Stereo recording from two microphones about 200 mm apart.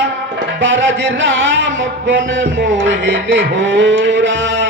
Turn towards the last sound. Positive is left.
turn(degrees=-70)  # may be behind; listen again after turning